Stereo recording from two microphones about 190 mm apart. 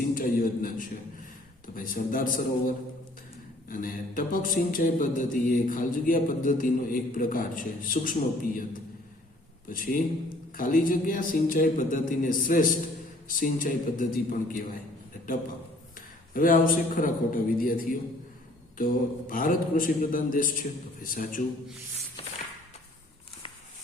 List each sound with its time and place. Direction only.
0.1 s a man's voice: 45° left (ahead or behind)
9.6 s speech: 45° left (ahead or behind)
16.0 s a man's voice: 45° left (ahead or behind)